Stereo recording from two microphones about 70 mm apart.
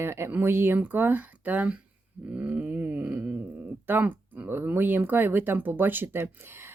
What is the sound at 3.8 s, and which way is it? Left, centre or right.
Speech, right.